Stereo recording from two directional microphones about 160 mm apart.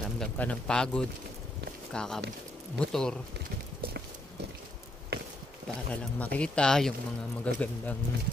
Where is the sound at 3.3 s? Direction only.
85° right.